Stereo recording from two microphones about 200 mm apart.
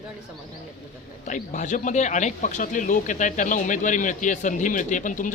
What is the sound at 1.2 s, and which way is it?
Speech, 40° left (ahead or behind).